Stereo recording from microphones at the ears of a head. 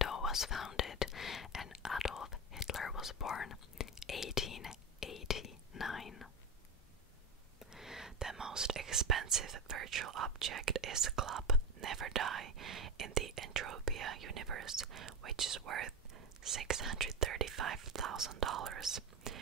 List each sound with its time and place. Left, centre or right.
0.0 s whispering: left
7.7 s a sound: centre
8.5 s speech: right